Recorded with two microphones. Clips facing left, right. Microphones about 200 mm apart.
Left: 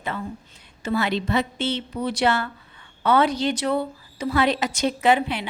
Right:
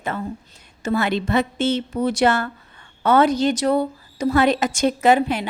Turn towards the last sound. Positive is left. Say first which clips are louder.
# right 3 dB
turn(degrees=-45)  # may be behind; listen again after turning